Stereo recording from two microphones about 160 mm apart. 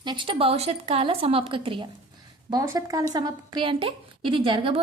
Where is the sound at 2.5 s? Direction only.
20° right (ahead or behind).